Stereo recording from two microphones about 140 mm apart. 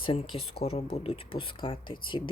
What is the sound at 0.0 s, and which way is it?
Speech, 40° left (ahead or behind).